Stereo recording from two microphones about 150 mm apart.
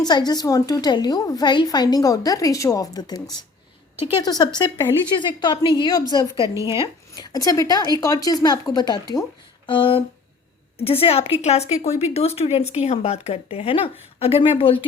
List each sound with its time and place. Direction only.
0.0 s a woman's voice: 25° left (ahead or behind)
6.3 s a woman's voice: 20° right (ahead or behind)
6.7 s a woman's voice: 30° left (ahead or behind)